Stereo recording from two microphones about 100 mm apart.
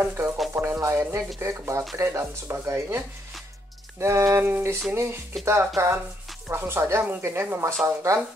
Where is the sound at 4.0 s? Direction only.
25° right (ahead or behind).